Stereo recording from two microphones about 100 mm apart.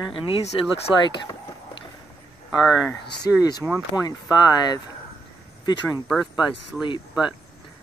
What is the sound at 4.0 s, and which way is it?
Speech, 40° left (ahead or behind).